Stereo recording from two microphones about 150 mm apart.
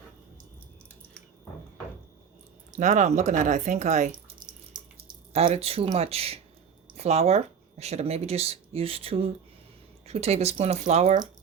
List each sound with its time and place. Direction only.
2.7 s speech: 55° right (ahead or behind)
5.5 s speech: 40° right (ahead or behind)